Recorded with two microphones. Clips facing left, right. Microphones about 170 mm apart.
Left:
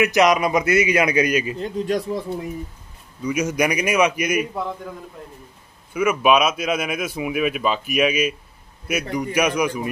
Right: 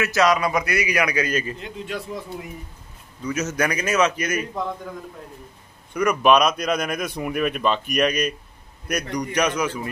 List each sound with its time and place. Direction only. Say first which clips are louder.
0.0 s a man's voice: left 3 dB; 20° left (ahead or behind)
1.6 s speech: left 8 dB; 40° left (ahead or behind)
3.3 s a man's voice: left 3 dB; 10° left (ahead or behind)
5.9 s a man's voice: even; 5° left (ahead or behind)